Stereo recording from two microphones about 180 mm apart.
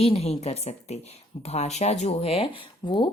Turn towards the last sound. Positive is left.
turn(degrees=25)  # may be behind; listen again after turning